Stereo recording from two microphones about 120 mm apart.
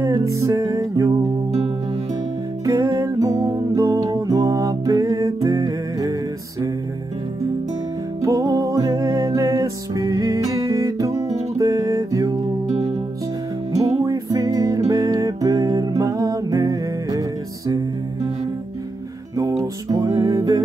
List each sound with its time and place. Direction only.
0.0 s music: 30° right (ahead or behind)
2.6 s music: 30° right (ahead or behind)
8.2 s music: 25° right (ahead or behind)
12.6 s music: 60° right (ahead or behind)
14.0 s music: 30° right (ahead or behind)
19.6 s music: 30° right (ahead or behind)